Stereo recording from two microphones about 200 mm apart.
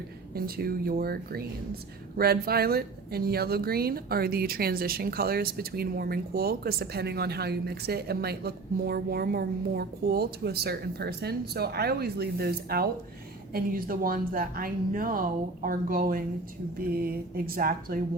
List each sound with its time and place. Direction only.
0.3 s speech: 50° right (ahead or behind)